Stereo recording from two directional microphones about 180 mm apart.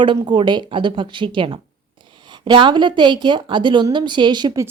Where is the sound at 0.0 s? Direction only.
25° right (ahead or behind).